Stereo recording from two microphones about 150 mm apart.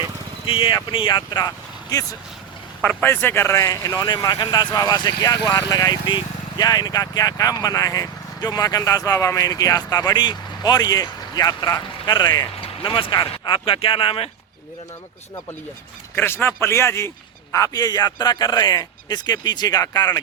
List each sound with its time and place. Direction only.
0.4 s speech: 35° left (ahead or behind)
2.8 s speech: 10° left (ahead or behind); by 14.3 s 35° left (ahead or behind)
16.1 s a man's voice: 15° left (ahead or behind)